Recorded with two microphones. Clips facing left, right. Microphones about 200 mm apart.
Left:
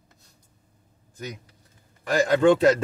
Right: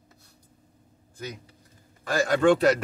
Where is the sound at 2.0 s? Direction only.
20° left (ahead or behind).